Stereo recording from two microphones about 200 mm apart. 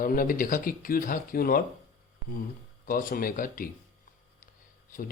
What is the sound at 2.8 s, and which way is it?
Speech, 45° left (ahead or behind).